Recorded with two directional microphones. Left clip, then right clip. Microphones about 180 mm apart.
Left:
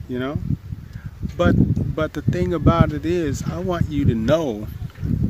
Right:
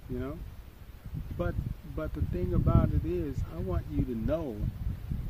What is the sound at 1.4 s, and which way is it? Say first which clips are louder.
Speech: left 17 dB; 15° left (ahead or behind).